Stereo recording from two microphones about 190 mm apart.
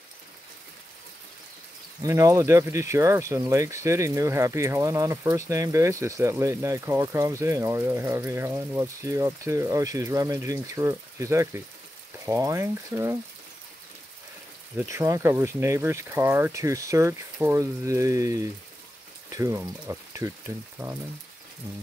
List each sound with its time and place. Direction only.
2.0 s speech: 15° right (ahead or behind)
14.8 s speech: 15° right (ahead or behind)